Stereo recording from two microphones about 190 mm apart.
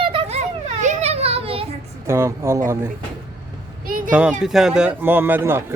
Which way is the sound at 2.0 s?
15° right (ahead or behind).